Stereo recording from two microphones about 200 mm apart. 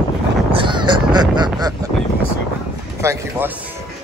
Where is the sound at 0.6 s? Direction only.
25° right (ahead or behind).